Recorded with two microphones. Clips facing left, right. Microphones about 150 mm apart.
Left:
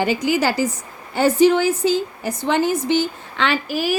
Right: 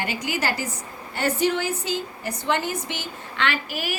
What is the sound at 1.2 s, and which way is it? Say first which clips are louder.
A woman's voice: left 9 dB; 90° left.